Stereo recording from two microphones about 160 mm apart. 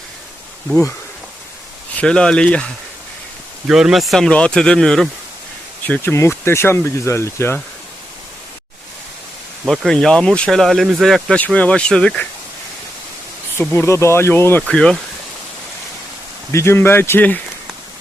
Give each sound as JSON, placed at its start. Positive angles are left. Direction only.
{"t": 2.0, "sound": "speech", "side_deg": 5}
{"t": 3.7, "sound": "speech", "side_deg": -5}
{"t": 9.6, "sound": "speech", "side_deg": 0}
{"t": 13.6, "sound": "speech", "side_deg": 15}
{"t": 16.5, "sound": "speech", "side_deg": 15}